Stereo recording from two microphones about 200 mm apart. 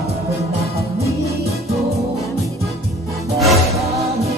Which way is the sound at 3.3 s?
Centre (ahead or behind).